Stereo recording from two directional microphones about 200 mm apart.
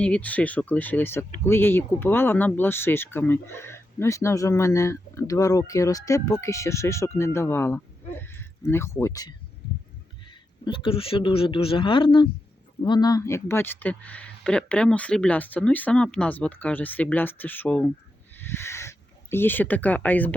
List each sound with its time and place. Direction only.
0.0 s speech: 5° left (ahead or behind)
10.2 s speech: 25° left (ahead or behind); by 20.3 s 10° left (ahead or behind)